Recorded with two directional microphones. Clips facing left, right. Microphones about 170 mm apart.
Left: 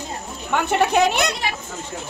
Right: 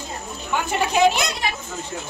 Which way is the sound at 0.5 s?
60° left (ahead or behind).